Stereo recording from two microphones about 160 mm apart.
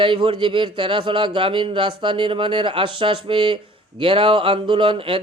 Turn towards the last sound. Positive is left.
turn(degrees=-35)  # may be behind; listen again after turning